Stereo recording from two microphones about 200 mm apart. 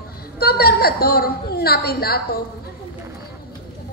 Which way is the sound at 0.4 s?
50° left (ahead or behind).